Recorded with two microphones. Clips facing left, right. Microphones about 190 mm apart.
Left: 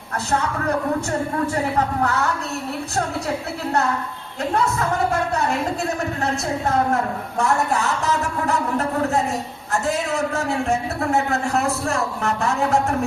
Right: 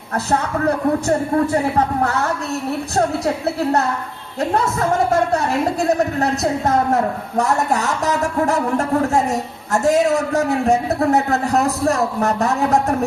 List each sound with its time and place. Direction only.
6.1 s a man's voice: 40° right (ahead or behind)
9.7 s a man's voice: 40° right (ahead or behind)